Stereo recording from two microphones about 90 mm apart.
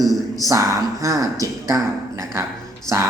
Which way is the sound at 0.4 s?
40° right (ahead or behind).